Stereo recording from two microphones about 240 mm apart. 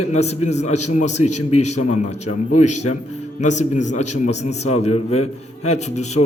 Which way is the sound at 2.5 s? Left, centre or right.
Left.